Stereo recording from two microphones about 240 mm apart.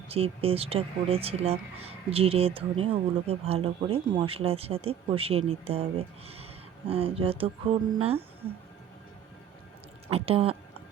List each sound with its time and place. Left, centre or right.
0.1 s speech: right
10.1 s a woman's voice: right